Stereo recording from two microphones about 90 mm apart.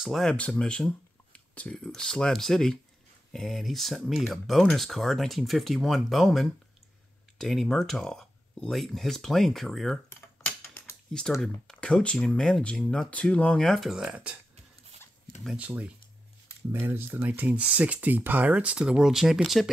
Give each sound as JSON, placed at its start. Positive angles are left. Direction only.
{"t": 0.0, "sound": "speech", "side_deg": 0}
{"t": 0.3, "sound": "speech", "side_deg": 15}
{"t": 11.1, "sound": "speech", "side_deg": 5}
{"t": 13.9, "sound": "speech", "side_deg": -10}
{"t": 15.5, "sound": "speech", "side_deg": -15}